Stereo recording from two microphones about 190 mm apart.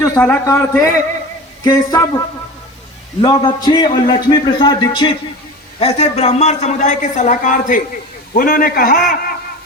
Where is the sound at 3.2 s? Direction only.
20° left (ahead or behind).